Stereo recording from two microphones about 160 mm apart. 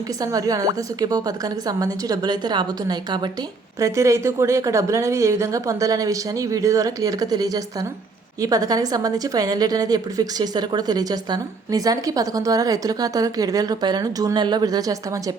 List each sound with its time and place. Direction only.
0.2 s a woman's voice: 20° right (ahead or behind)